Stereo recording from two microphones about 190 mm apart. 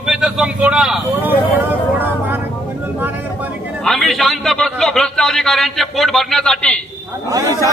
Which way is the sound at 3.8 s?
Centre (ahead or behind).